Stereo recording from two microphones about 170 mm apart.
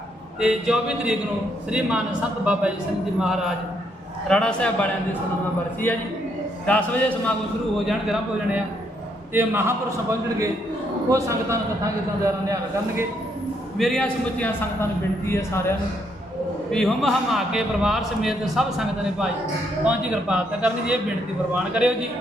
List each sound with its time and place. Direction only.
0.3 s a man's voice: 5° right (ahead or behind)
2.4 s a man's voice: 5° right (ahead or behind)
6.7 s a man's voice: 10° left (ahead or behind)
7.9 s a man's voice: centre (ahead or behind)
9.3 s a man's voice: 15° right (ahead or behind)
13.7 s a man's voice: centre (ahead or behind)
16.7 s a man's voice: centre (ahead or behind)